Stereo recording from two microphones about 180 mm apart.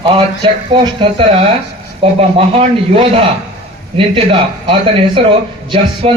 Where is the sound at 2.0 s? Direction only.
30° right (ahead or behind).